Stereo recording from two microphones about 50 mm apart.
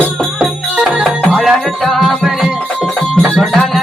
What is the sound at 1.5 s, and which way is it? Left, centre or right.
Music, centre.